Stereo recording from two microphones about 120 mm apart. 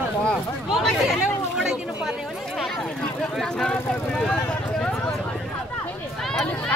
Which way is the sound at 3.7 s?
10° left (ahead or behind).